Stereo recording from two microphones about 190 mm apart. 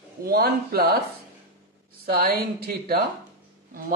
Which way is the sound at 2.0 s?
50° right (ahead or behind).